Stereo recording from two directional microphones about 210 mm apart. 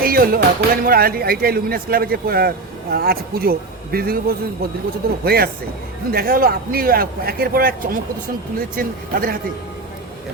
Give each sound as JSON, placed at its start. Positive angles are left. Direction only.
{"t": 0.0, "sound": "speech", "side_deg": -45}